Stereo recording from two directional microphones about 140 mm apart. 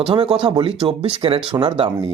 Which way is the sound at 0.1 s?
40° right (ahead or behind).